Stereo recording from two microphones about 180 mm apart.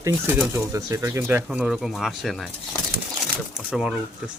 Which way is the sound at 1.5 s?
5° right (ahead or behind).